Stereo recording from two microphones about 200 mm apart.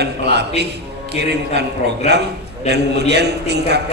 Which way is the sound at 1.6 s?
55° right (ahead or behind).